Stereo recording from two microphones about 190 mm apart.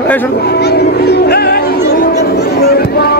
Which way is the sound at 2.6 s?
55° left (ahead or behind).